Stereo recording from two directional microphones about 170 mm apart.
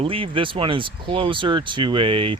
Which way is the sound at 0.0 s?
30° right (ahead or behind).